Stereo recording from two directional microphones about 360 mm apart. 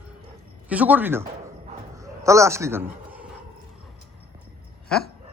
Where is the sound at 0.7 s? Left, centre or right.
Centre.